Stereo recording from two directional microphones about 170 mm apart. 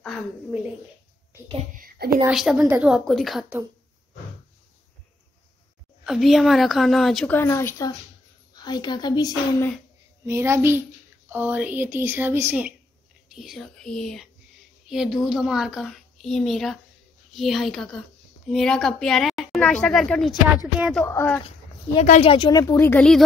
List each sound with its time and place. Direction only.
0.0 s speech: centre (ahead or behind)
1.7 s a sound: 55° right (ahead or behind)
2.2 s speech: 5° right (ahead or behind)
6.0 s speech: centre (ahead or behind)
7.3 s a woman's voice: 15° left (ahead or behind)
10.2 s speech: 15° right (ahead or behind); by 21.0 s centre (ahead or behind)
21.0 s speech: 15° left (ahead or behind)
22.2 s a woman's voice: 30° left (ahead or behind); by 23.2 s 5° left (ahead or behind)